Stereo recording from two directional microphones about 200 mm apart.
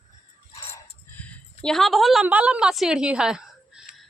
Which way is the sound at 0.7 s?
10° left (ahead or behind).